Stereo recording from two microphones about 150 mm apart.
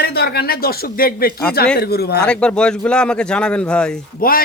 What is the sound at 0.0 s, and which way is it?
Speech, 90° left.